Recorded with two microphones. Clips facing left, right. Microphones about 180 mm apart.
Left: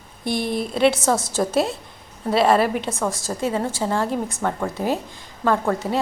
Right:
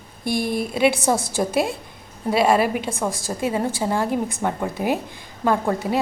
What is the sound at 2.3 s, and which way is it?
A woman's voice, 10° right (ahead or behind).